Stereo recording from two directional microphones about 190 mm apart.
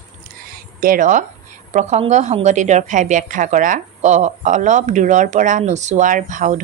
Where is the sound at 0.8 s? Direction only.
45° right (ahead or behind).